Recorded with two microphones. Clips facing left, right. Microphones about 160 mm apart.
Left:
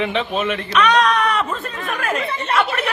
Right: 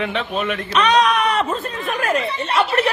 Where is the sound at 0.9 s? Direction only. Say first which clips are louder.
Right 2 dB; 15° right (ahead or behind).